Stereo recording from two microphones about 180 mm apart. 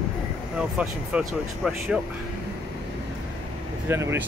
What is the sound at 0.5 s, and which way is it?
Speech, 5° right (ahead or behind).